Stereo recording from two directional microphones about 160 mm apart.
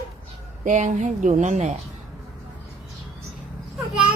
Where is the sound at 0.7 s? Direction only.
50° right (ahead or behind).